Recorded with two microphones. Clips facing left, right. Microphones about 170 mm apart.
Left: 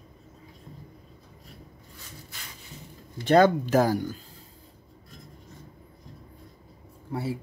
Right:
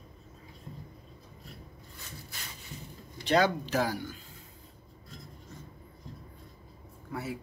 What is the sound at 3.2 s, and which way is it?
Speech, 50° left (ahead or behind).